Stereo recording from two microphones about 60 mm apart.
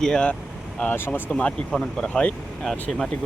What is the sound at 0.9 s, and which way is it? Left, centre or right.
Speech, left.